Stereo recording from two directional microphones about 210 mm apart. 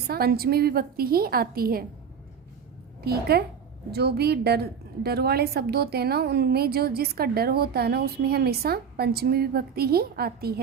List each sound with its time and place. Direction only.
0.1 s a woman's voice: 45° right (ahead or behind)
3.0 s a woman's voice: 50° right (ahead or behind)